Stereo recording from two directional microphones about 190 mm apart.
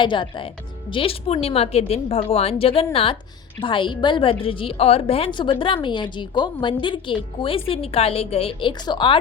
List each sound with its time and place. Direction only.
0.0 s a woman's voice: 25° left (ahead or behind)